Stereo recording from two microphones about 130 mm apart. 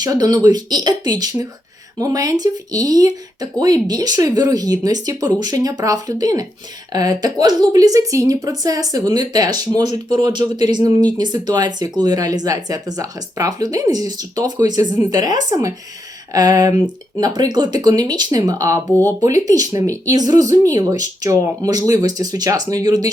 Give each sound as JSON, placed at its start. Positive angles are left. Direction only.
{"t": 0.0, "sound": "a woman's voice", "side_deg": -30}